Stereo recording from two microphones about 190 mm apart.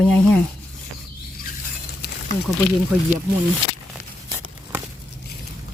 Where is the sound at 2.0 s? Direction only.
60° left (ahead or behind).